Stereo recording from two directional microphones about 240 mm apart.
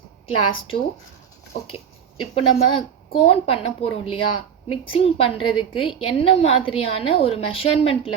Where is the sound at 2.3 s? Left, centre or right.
Left.